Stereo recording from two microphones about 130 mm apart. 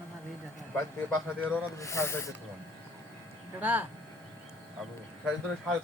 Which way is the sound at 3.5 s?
15° right (ahead or behind).